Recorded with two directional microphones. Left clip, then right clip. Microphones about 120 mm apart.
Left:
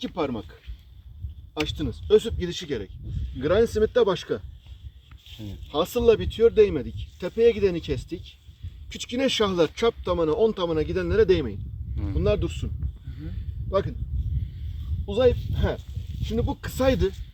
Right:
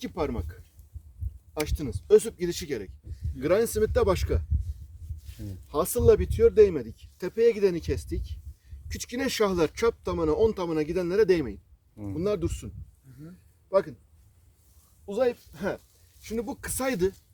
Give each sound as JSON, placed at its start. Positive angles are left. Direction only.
{"t": 0.1, "sound": "speech", "side_deg": -55}
{"t": 1.6, "sound": "speech", "side_deg": -60}
{"t": 5.6, "sound": "speech", "side_deg": -45}
{"t": 11.9, "sound": "speech", "side_deg": -35}
{"t": 13.7, "sound": "speech", "side_deg": -25}
{"t": 15.0, "sound": "speech", "side_deg": -30}